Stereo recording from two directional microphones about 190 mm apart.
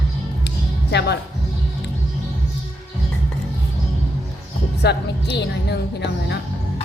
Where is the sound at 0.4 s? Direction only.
60° left (ahead or behind).